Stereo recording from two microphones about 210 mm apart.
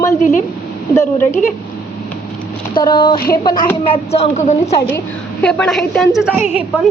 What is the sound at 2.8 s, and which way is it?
A woman's voice, 25° left (ahead or behind).